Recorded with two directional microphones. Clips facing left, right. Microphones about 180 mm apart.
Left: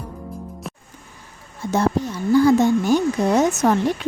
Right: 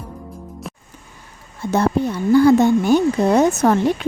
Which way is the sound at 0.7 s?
Centre (ahead or behind).